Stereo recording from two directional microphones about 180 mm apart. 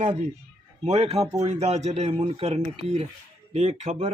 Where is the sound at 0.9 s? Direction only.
35° right (ahead or behind).